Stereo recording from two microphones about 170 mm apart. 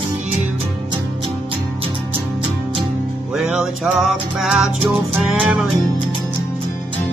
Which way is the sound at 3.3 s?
5° right (ahead or behind).